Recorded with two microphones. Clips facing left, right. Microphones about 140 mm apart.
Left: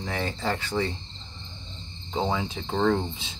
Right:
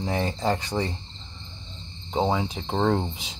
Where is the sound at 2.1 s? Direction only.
15° right (ahead or behind).